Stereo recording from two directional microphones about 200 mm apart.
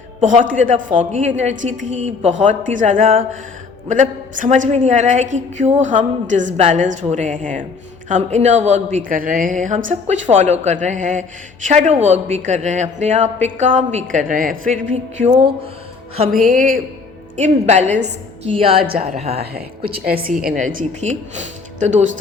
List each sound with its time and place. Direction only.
0.2 s a woman's voice: 40° right (ahead or behind)
17.3 s a woman's voice: 35° right (ahead or behind)
18.9 s a woman's voice: 45° right (ahead or behind)